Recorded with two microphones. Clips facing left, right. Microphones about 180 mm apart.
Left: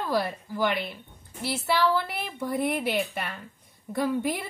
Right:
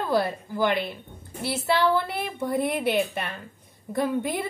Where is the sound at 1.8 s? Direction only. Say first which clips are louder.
Right 1 dB; 25° right (ahead or behind).